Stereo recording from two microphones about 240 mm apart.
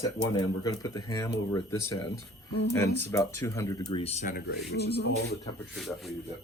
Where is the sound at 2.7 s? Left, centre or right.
Centre.